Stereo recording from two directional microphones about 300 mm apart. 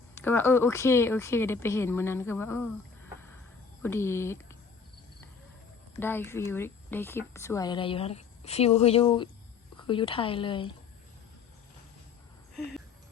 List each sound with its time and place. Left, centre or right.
0.1 s speech: centre
3.8 s speech: centre
6.0 s speech: centre